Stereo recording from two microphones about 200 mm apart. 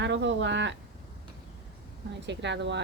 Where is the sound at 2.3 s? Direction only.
60° right (ahead or behind).